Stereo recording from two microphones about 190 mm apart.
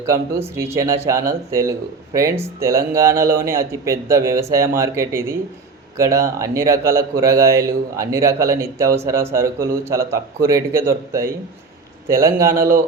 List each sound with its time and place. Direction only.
0.0 s speech: 15° right (ahead or behind)